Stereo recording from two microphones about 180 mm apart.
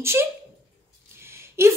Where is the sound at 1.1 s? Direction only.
15° right (ahead or behind).